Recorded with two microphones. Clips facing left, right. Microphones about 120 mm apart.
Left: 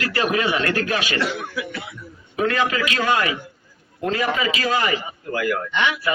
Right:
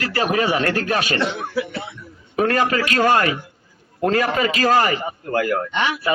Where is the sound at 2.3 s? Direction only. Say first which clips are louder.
Right 3 dB; 45° right (ahead or behind).